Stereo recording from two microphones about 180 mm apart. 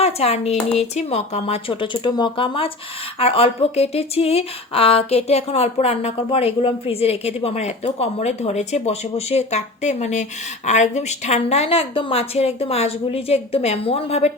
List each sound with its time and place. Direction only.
0.0 s speech: 35° left (ahead or behind)